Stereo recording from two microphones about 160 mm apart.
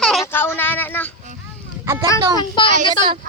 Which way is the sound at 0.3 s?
15° left (ahead or behind).